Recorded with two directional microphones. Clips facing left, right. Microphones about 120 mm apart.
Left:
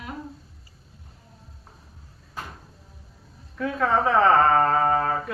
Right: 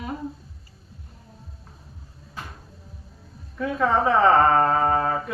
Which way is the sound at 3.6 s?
5° right (ahead or behind).